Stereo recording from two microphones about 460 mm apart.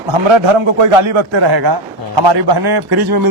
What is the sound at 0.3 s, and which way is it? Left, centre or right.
A man's voice, right.